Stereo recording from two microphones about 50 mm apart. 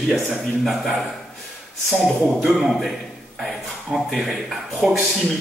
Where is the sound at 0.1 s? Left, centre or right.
Centre.